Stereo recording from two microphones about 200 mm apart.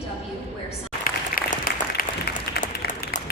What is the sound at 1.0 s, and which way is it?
Applause, 45° left (ahead or behind).